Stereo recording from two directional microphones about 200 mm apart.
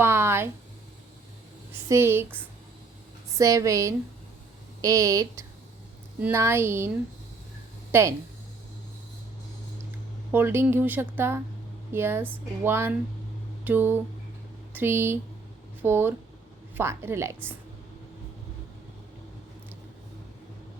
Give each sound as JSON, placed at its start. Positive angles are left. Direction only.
{"t": 0.0, "sound": "a sound", "side_deg": -10}
{"t": 1.9, "sound": "speech", "side_deg": -10}
{"t": 7.9, "sound": "speech", "side_deg": -10}
{"t": 10.3, "sound": "speech", "side_deg": -10}